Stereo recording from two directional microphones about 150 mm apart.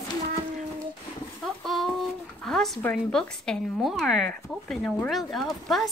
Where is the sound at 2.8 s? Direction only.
5° left (ahead or behind).